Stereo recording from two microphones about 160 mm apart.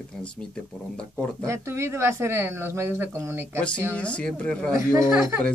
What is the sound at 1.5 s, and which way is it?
Speech, 15° right (ahead or behind).